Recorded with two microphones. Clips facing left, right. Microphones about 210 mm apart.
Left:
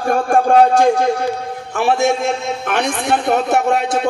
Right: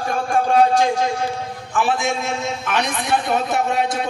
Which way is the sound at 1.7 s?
65° left (ahead or behind).